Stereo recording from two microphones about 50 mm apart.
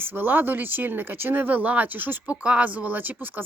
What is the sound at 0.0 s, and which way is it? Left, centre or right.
Speech, right.